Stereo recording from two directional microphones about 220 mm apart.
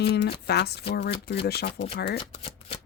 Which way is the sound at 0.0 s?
50° left (ahead or behind).